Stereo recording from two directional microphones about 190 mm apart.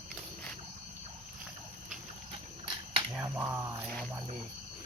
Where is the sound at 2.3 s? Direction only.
30° right (ahead or behind).